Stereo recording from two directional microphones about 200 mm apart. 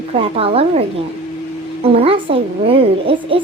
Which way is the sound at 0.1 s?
30° right (ahead or behind).